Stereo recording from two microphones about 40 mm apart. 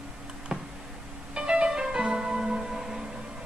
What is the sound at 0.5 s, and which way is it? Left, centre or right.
Tick-tock, right.